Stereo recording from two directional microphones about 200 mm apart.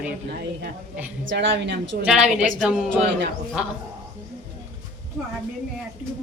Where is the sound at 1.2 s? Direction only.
65° right (ahead or behind).